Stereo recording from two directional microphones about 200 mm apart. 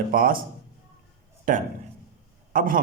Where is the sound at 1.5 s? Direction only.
40° right (ahead or behind).